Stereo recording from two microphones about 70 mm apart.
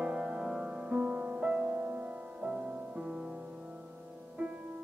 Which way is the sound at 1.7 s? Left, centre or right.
Right.